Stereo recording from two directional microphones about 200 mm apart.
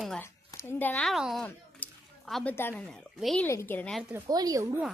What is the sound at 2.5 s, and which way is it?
Speech, 10° left (ahead or behind).